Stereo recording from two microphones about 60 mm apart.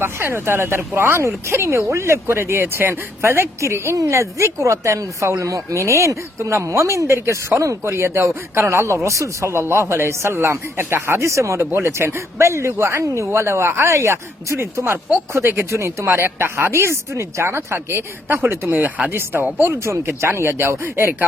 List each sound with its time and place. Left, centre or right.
0.0 s a woman's voice: right
11.6 s a woman's voice: right
13.9 s a woman's voice: right
19.7 s a woman's voice: right